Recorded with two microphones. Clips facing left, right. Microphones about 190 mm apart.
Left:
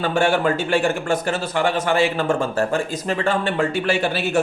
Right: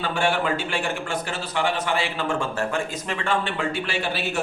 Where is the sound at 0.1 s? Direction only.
45° left (ahead or behind).